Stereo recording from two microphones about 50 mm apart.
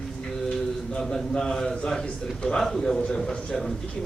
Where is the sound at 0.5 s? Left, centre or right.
Centre.